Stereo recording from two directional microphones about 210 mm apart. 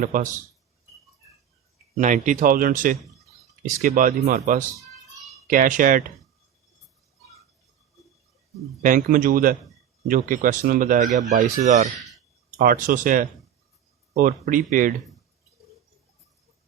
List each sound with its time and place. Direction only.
0.0 s speech: 40° right (ahead or behind)
2.0 s speech: 35° right (ahead or behind)
4.8 s a sound: centre (ahead or behind)
5.5 s speech: 40° right (ahead or behind)
8.8 s speech: 40° right (ahead or behind)